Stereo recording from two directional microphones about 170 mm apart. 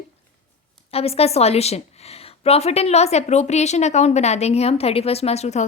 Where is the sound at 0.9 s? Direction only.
35° left (ahead or behind).